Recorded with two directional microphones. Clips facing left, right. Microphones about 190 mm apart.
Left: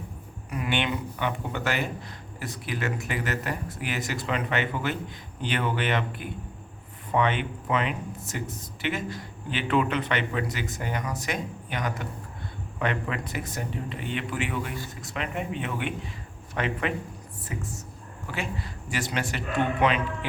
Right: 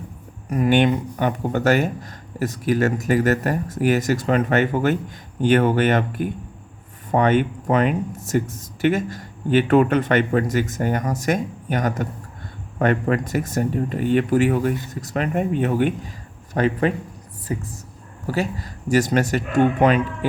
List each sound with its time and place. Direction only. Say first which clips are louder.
0.5 s a man's voice: right 11 dB; 45° right (ahead or behind)